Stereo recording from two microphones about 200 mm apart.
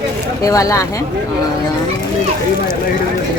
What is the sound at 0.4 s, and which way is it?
Speech, 15° left (ahead or behind).